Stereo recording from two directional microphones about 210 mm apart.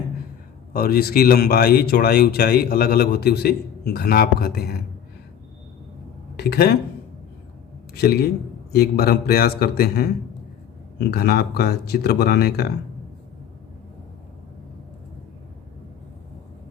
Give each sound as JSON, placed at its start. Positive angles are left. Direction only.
{"t": 0.7, "sound": "speech", "side_deg": 45}
{"t": 6.3, "sound": "speech", "side_deg": 50}
{"t": 7.9, "sound": "speech", "side_deg": 50}
{"t": 11.1, "sound": "speech", "side_deg": 50}